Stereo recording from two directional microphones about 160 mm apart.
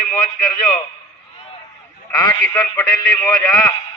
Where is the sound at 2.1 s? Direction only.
20° left (ahead or behind).